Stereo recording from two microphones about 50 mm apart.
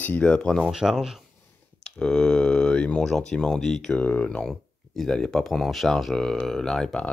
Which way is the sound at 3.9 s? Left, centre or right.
Left.